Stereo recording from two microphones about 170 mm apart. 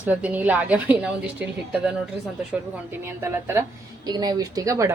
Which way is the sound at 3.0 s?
15° right (ahead or behind).